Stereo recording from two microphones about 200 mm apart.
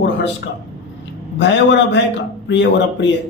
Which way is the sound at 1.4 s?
60° left (ahead or behind).